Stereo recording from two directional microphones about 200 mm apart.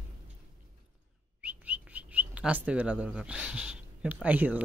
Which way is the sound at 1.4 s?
5° right (ahead or behind).